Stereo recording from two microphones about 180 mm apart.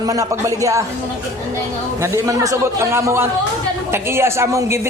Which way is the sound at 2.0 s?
15° right (ahead or behind).